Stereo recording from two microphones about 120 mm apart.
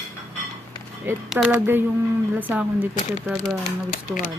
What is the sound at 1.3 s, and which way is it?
Speech, 10° right (ahead or behind).